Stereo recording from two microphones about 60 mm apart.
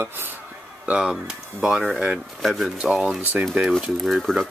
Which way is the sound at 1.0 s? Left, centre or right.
Centre.